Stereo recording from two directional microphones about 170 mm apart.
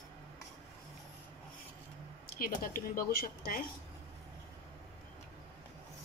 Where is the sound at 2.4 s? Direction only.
60° left (ahead or behind).